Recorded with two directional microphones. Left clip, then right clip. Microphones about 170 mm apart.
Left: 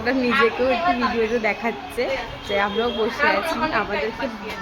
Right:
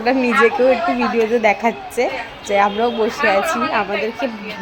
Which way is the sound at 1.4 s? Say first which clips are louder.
Right 7 dB; 20° right (ahead or behind).